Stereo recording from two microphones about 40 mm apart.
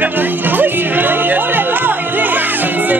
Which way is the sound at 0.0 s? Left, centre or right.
Right.